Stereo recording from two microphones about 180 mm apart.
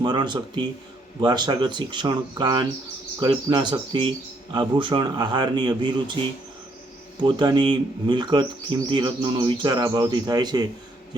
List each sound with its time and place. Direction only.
0.0 s speech: 25° right (ahead or behind)
7.2 s speech: 25° right (ahead or behind)